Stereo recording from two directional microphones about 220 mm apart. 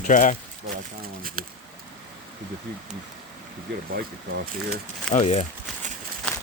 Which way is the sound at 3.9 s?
45° right (ahead or behind).